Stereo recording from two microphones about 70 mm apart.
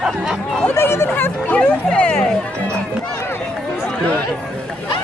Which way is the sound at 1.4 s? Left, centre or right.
Centre.